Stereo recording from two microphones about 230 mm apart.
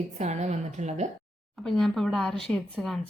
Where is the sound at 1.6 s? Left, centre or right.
Centre.